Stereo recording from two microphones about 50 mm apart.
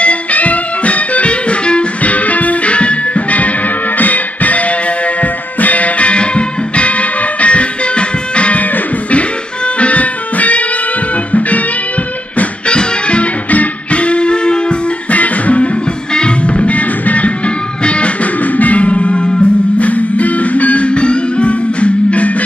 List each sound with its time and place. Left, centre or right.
0.0 s music: left
9.8 s music: left
12.4 s music: left
15.0 s music: left
19.9 s music: left